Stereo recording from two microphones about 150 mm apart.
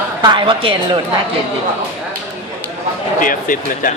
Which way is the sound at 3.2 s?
65° left (ahead or behind).